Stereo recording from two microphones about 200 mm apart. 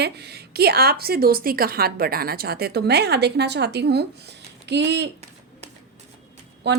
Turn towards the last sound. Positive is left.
turn(degrees=-60)  # may be behind; listen again after turning